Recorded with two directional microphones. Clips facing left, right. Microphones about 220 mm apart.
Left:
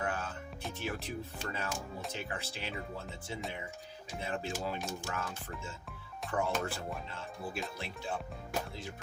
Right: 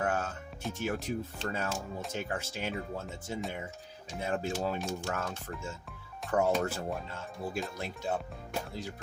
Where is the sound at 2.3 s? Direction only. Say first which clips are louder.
Right 5 dB; 45° right (ahead or behind).